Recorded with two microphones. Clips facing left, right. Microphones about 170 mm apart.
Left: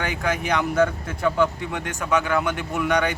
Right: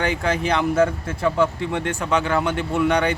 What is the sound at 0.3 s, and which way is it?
Speech, 25° right (ahead or behind).